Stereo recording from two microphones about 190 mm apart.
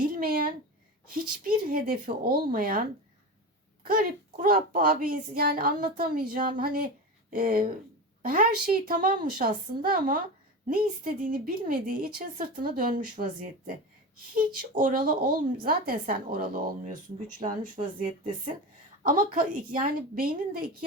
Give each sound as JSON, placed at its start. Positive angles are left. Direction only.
{"t": 0.0, "sound": "a sound", "side_deg": -50}
{"t": 1.5, "sound": "a woman's voice", "side_deg": -50}
{"t": 3.8, "sound": "a woman's voice", "side_deg": -50}